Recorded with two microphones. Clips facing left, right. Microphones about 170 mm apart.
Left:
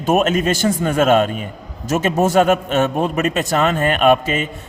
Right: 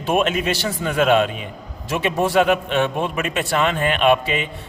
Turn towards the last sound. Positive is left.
turn(degrees=40)  # may be behind; listen again after turning